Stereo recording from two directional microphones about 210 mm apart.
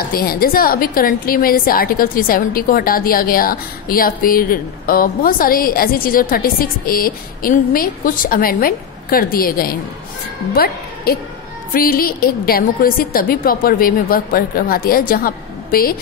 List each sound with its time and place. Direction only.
0.1 s a woman's voice: 45° left (ahead or behind)